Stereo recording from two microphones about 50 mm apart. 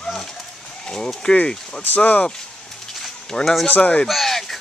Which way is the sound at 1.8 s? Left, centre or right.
Left.